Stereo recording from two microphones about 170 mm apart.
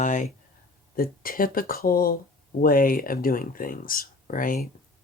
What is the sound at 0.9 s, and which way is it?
Speech, 60° left (ahead or behind).